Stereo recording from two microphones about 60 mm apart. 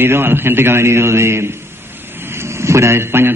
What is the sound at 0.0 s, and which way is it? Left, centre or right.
A man's voice, right.